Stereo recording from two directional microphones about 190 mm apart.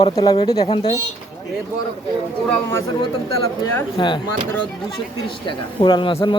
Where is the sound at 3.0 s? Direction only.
25° left (ahead or behind).